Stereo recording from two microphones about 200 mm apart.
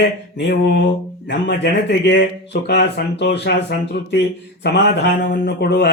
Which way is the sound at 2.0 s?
55° left (ahead or behind).